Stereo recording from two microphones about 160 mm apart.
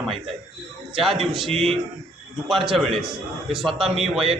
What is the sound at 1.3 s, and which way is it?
A man's voice, centre (ahead or behind).